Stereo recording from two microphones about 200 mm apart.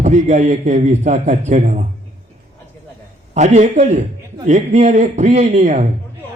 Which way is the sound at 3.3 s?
35° right (ahead or behind).